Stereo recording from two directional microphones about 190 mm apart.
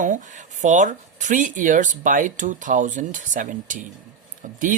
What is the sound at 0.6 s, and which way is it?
Speech, 40° right (ahead or behind).